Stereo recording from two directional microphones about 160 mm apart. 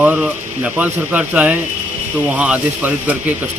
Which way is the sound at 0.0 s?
10° right (ahead or behind).